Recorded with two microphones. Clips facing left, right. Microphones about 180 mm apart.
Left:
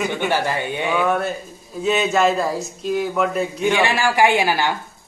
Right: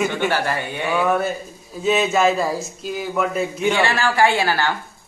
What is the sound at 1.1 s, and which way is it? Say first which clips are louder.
Speech: right 1 dB; centre (ahead or behind).